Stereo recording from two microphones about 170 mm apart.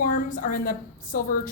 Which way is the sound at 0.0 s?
50° left (ahead or behind).